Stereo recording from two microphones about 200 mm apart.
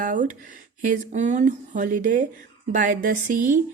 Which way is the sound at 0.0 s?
40° right (ahead or behind).